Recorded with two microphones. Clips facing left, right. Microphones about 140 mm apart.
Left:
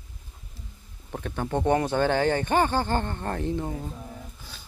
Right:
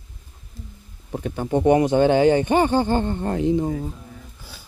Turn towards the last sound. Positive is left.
turn(degrees=-15)  # may be behind; listen again after turning